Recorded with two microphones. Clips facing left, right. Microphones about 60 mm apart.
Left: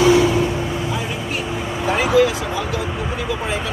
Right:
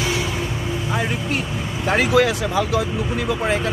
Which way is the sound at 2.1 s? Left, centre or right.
Right.